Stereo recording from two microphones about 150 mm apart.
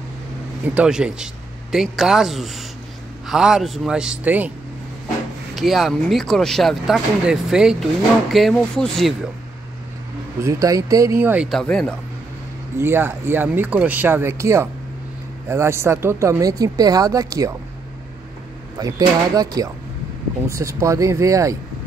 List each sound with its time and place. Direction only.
0.7 s speech: 5° right (ahead or behind)
5.6 s speech: centre (ahead or behind)
10.4 s a woman's voice: 20° right (ahead or behind)
11.4 s speech: centre (ahead or behind)
12.7 s a woman's voice: 15° right (ahead or behind)
18.8 s a woman's voice: 25° right (ahead or behind)